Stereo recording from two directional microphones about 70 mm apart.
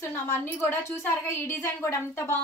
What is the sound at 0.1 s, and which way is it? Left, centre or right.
A woman's voice, left.